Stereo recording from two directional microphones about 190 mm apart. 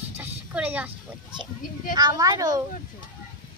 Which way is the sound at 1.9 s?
20° right (ahead or behind).